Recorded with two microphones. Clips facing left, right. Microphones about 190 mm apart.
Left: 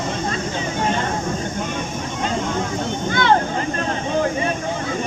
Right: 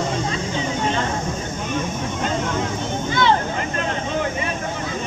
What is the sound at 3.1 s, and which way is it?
Vehicle, 55° left (ahead or behind).